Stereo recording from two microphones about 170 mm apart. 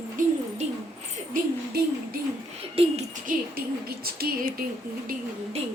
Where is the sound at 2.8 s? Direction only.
35° right (ahead or behind).